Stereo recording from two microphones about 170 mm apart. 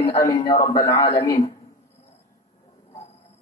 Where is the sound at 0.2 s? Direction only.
20° left (ahead or behind).